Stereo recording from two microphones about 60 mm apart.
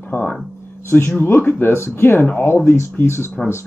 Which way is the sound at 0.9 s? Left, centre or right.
Left.